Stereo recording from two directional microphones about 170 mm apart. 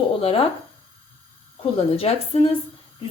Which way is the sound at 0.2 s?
35° left (ahead or behind).